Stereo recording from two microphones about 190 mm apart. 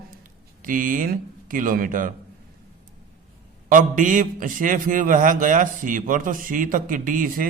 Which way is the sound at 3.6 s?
45° right (ahead or behind).